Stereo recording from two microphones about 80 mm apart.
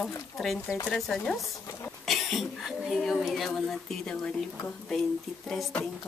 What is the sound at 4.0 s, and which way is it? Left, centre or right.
Speech, centre.